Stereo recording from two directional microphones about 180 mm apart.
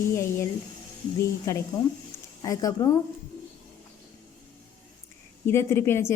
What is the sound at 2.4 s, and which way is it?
Speech, 20° left (ahead or behind).